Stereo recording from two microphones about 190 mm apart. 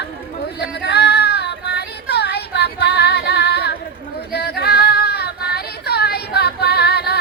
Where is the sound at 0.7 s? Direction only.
60° left (ahead or behind).